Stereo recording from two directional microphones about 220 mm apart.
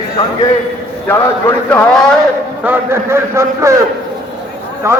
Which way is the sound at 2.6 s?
10° right (ahead or behind).